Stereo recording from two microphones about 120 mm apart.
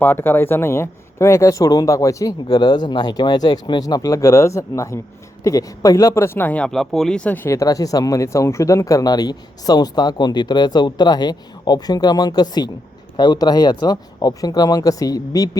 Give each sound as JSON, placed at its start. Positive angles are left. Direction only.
{"t": 0.0, "sound": "speech", "side_deg": 20}